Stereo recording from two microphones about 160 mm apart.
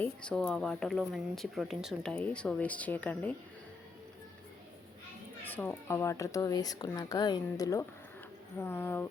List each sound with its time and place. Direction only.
0.0 s speech: 5° left (ahead or behind)
5.5 s speech: 15° left (ahead or behind)